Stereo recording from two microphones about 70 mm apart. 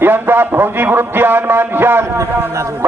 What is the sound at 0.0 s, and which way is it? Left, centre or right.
Speech, right.